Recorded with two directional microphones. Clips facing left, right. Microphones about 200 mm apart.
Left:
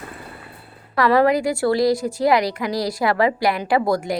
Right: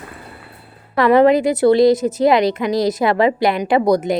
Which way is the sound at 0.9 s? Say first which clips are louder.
Right 5 dB; 20° right (ahead or behind).